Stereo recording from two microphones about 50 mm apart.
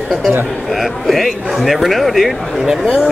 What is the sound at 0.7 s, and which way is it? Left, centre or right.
Speech, centre.